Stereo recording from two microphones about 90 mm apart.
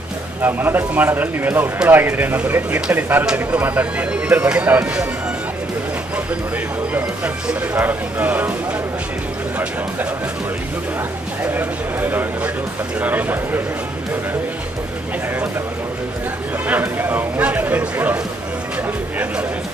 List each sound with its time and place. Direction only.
0.4 s speech: 25° right (ahead or behind)
7.4 s speech: 15° right (ahead or behind)
11.5 s speech: 20° right (ahead or behind)
16.6 s a sound: 20° right (ahead or behind)